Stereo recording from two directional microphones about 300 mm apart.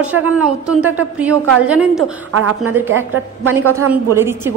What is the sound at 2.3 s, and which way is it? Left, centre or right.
A woman's voice, right.